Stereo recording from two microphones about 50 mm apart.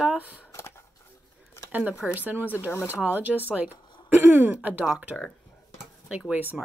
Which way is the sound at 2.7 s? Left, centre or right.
Left.